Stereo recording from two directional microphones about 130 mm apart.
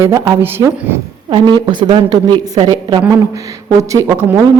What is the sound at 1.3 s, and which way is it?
A woman's voice, 35° right (ahead or behind).